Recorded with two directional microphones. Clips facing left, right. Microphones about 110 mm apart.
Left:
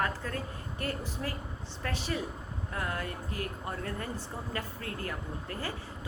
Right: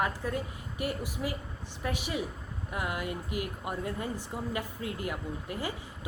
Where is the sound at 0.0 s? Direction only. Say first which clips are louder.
Right 2 dB; 15° right (ahead or behind).